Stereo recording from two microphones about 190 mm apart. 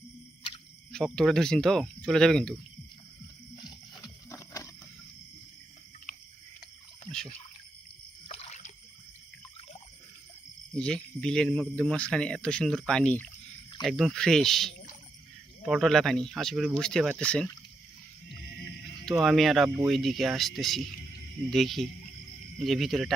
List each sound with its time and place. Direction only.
0.9 s speech: centre (ahead or behind)
3.5 s music: 20° left (ahead or behind)
4.0 s a sound: 15° left (ahead or behind)
8.3 s a sound: 35° left (ahead or behind)
10.8 s speech: 5° left (ahead or behind)
19.0 s speech: centre (ahead or behind)